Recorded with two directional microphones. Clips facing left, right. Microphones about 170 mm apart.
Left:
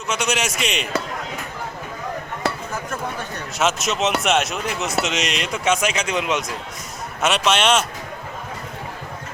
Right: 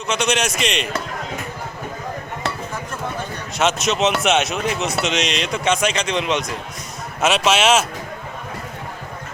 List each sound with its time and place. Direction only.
0.1 s speech: 5° left (ahead or behind)
3.6 s speech: centre (ahead or behind)